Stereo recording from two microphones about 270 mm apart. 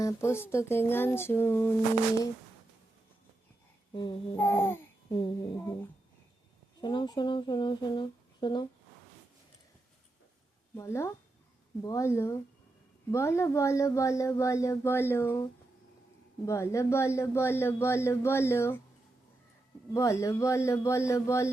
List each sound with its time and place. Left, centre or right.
0.0 s speech: centre
3.9 s speech: centre
5.1 s a sound: centre
6.8 s speech: centre
10.8 s speech: centre
16.5 s speech: centre
19.9 s speech: centre